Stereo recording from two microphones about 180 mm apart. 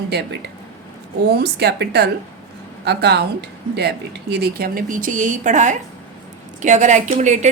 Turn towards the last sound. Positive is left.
turn(degrees=-40)  # may be behind; listen again after turning